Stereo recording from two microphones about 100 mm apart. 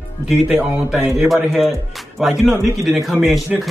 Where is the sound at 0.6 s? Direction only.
15° right (ahead or behind).